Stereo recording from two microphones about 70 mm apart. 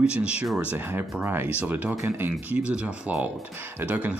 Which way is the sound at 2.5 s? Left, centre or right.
Centre.